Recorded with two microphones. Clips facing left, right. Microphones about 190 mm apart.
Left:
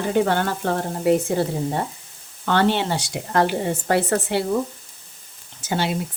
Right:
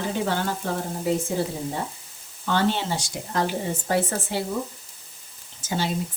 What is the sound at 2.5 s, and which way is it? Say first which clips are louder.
A woman's voice: left 4 dB; 65° left (ahead or behind).